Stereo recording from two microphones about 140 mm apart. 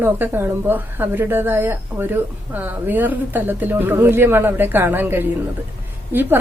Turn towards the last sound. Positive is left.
turn(degrees=-15)  # may be behind; listen again after turning